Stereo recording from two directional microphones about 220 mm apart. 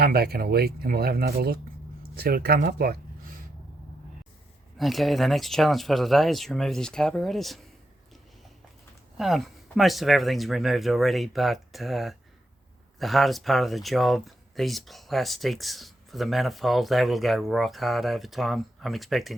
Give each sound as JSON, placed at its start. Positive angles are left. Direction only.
{"t": 0.0, "sound": "speech", "side_deg": -45}
{"t": 4.8, "sound": "speech", "side_deg": 0}
{"t": 9.1, "sound": "speech", "side_deg": 0}